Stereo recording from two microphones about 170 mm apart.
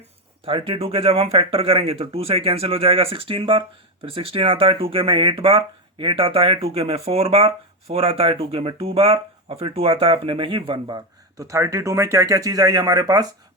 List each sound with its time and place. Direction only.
0.4 s speech: 30° right (ahead or behind)